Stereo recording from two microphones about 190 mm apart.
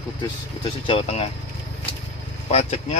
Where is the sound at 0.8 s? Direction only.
30° left (ahead or behind).